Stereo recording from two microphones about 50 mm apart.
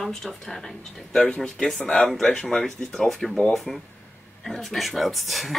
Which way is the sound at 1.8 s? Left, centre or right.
Left.